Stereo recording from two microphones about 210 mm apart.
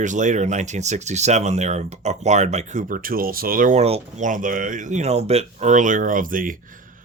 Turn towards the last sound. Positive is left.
turn(degrees=-40)  # may be behind; listen again after turning